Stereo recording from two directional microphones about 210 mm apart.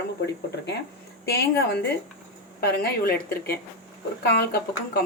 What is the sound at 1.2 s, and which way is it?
A woman's voice, 50° left (ahead or behind).